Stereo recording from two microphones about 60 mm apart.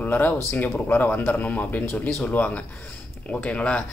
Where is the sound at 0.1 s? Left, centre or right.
Left.